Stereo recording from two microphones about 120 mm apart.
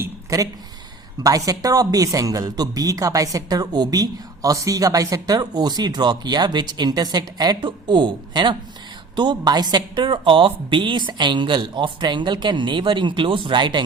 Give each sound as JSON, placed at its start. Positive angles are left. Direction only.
{"t": 1.2, "sound": "a woman's voice", "side_deg": -30}